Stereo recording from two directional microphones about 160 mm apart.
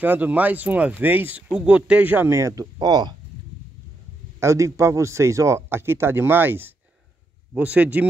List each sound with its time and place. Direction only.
0.0 s speech: 10° right (ahead or behind); by 3.2 s 25° right (ahead or behind)
4.4 s speech: 20° right (ahead or behind)